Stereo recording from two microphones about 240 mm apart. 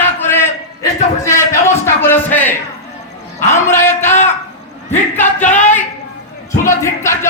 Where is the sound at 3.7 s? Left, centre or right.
Centre.